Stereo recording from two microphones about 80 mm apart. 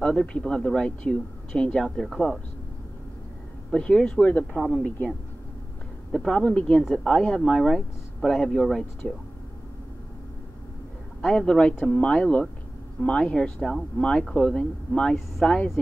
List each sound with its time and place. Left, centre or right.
0.0 s speech: centre
3.7 s speech: centre
6.1 s speech: centre
11.1 s speech: centre